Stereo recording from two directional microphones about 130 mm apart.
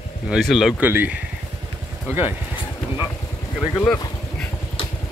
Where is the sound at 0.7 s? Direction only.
15° right (ahead or behind).